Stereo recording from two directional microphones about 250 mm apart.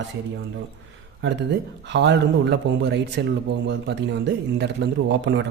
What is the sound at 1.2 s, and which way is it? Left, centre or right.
Speech, right.